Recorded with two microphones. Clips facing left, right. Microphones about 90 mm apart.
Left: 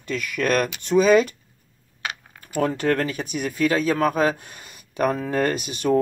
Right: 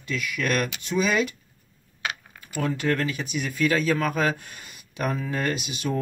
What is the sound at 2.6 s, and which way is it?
Speech, 45° left (ahead or behind).